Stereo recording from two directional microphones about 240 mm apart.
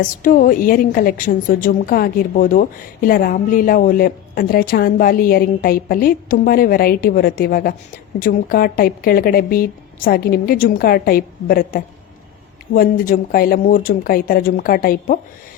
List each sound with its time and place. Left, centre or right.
0.0 s a woman's voice: left